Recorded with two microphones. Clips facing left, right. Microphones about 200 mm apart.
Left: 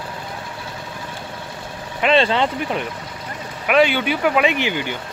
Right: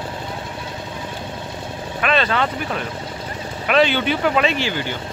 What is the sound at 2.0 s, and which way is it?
Speech, 25° left (ahead or behind).